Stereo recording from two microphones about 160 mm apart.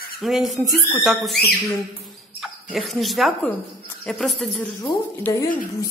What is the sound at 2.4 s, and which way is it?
Speech, centre (ahead or behind).